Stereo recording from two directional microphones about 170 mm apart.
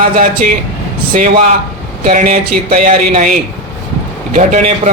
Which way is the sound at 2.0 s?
45° right (ahead or behind).